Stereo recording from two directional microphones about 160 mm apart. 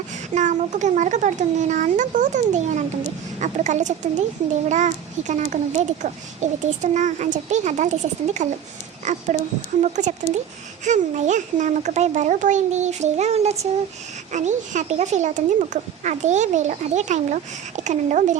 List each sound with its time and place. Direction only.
0.3 s speech: 50° right (ahead or behind)